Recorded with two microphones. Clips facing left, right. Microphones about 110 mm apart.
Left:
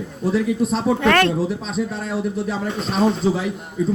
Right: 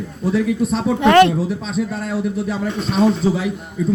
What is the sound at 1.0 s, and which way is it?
Speech, 20° right (ahead or behind).